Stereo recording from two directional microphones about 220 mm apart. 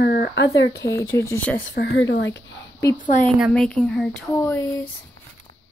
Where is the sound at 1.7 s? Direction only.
55° left (ahead or behind).